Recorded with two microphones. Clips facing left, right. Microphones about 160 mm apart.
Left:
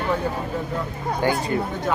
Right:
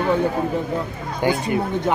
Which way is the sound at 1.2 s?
20° right (ahead or behind).